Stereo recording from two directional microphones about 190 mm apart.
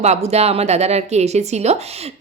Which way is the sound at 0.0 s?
35° right (ahead or behind).